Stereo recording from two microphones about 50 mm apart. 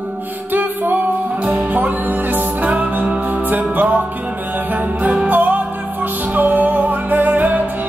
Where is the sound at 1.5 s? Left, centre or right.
Right.